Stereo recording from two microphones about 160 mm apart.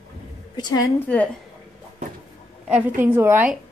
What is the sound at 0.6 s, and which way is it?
Speech, 25° left (ahead or behind).